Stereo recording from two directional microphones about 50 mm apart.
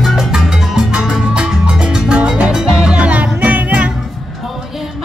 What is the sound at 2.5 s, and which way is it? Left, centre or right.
Music, centre.